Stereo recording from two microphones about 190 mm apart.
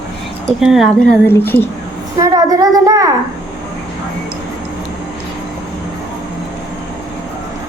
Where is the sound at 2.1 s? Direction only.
20° right (ahead or behind).